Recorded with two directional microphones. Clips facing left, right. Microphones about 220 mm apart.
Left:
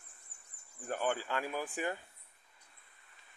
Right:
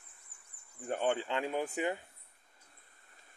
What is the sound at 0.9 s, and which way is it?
Speech, 25° right (ahead or behind).